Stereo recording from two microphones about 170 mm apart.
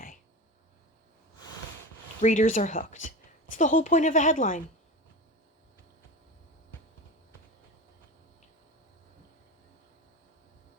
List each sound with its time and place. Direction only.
2.2 s a woman's voice: 50° left (ahead or behind)